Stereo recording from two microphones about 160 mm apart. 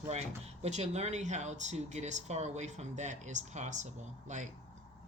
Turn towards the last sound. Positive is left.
turn(degrees=-50)  # may be behind; listen again after turning